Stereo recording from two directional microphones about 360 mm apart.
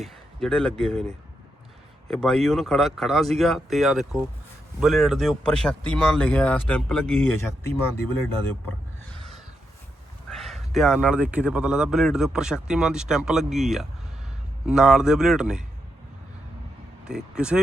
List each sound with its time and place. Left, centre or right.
0.0 s speech: centre
2.0 s a man's voice: centre
10.2 s a man's voice: centre
17.1 s a man's voice: centre